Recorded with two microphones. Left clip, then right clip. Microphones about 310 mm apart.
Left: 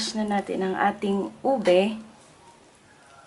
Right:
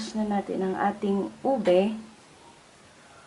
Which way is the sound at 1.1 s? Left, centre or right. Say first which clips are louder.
Left 2 dB; centre.